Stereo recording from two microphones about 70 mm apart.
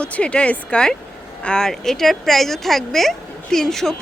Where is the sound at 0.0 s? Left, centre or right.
Centre.